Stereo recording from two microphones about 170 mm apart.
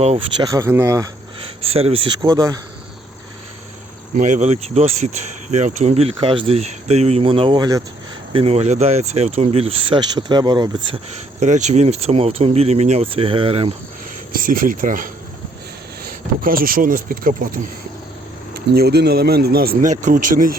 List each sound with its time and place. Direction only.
0.4 s speech: 15° right (ahead or behind)
1.6 s speech: 35° right (ahead or behind)
4.1 s speech: 45° right (ahead or behind); by 11.0 s 25° right (ahead or behind)
11.3 s speech: 45° right (ahead or behind)
14.3 s speech: 55° right (ahead or behind)
18.5 s speech: 65° right (ahead or behind)
19.9 s speech: 45° right (ahead or behind)